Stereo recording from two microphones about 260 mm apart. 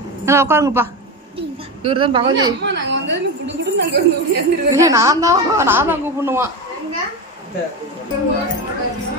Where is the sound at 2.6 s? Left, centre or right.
Right.